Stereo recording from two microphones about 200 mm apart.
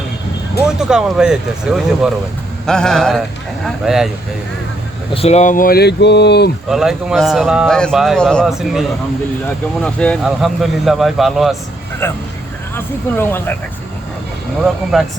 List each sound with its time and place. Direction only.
0.8 s speech: 5° right (ahead or behind)
5.1 s speech: 30° left (ahead or behind); by 6.5 s 55° left (ahead or behind)
6.7 s speech: centre (ahead or behind)
12.0 s speech: 10° left (ahead or behind)
14.6 s speech: centre (ahead or behind)